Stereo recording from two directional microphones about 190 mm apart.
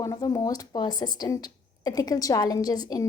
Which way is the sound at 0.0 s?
20° left (ahead or behind).